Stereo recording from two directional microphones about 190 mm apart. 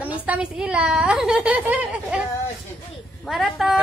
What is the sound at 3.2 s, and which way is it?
Speech, centre (ahead or behind).